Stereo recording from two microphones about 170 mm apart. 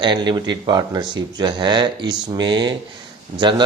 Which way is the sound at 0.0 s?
25° right (ahead or behind).